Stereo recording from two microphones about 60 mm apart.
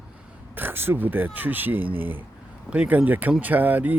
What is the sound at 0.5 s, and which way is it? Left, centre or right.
A man's voice, right.